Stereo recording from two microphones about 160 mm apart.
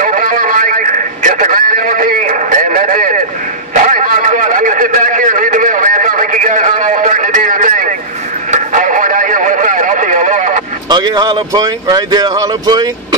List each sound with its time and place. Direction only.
0.0 s a sound: 55° right (ahead or behind)
8.5 s radio: 50° right (ahead or behind)
10.9 s speech: 25° right (ahead or behind)